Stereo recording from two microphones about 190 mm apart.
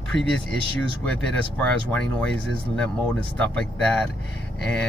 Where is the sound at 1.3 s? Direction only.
5° left (ahead or behind).